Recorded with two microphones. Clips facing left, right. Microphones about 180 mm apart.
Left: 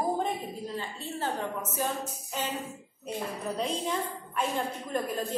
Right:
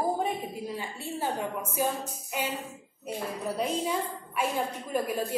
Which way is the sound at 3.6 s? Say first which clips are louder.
Right 2 dB; 5° right (ahead or behind).